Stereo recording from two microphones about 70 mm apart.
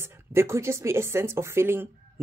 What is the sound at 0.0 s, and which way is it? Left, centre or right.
Speech, right.